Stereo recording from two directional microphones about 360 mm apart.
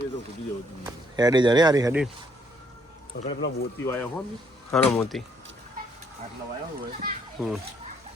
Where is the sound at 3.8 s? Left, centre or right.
Centre.